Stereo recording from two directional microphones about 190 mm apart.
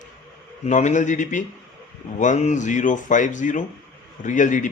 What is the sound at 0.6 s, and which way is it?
Speech, 40° left (ahead or behind).